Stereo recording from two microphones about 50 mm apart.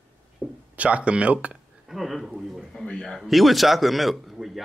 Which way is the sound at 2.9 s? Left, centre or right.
Centre.